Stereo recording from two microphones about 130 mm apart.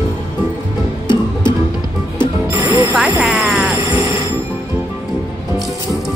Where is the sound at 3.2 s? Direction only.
Centre (ahead or behind).